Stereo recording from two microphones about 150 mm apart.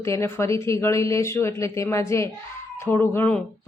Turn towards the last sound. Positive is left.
turn(degrees=10)  # may be behind; listen again after turning